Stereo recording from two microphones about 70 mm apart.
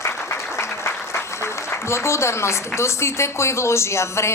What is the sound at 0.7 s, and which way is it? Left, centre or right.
A woman's voice, left.